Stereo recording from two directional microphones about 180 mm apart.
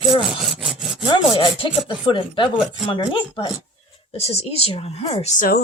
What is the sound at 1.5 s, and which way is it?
Speech, 30° left (ahead or behind).